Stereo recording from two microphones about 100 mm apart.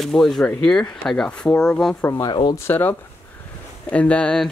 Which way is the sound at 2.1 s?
50° left (ahead or behind).